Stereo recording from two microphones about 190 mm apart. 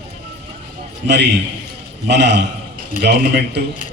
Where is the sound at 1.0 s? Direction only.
65° right (ahead or behind).